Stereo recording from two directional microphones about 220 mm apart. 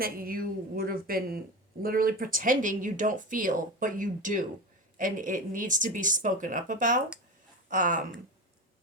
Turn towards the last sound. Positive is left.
turn(degrees=-35)  # may be behind; listen again after turning